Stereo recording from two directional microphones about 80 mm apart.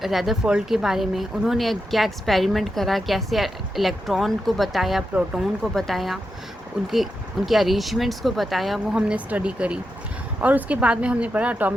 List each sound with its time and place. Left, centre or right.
0.0 s speech: centre